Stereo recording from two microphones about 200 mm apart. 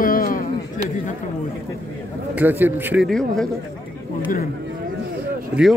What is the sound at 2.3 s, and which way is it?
Speech, 10° right (ahead or behind).